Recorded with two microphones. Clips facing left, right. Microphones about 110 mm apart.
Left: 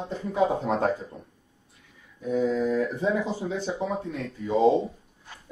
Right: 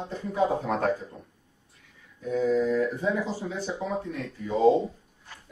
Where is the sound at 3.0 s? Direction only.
20° left (ahead or behind).